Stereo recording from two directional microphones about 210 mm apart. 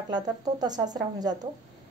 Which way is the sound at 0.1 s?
20° right (ahead or behind).